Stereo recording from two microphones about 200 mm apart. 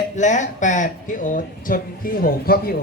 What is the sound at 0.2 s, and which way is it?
A man's voice, 35° left (ahead or behind).